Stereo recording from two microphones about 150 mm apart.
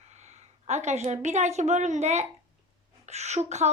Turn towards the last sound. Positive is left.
turn(degrees=-50)  # may be behind; listen again after turning